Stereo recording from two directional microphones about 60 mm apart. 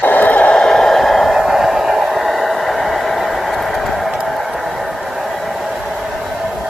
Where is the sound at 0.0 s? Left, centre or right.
Left; by 4.1 s centre.